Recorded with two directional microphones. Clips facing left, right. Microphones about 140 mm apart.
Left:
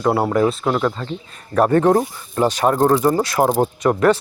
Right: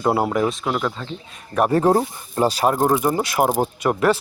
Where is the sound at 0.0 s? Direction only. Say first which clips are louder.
Left 2 dB; 10° right (ahead or behind).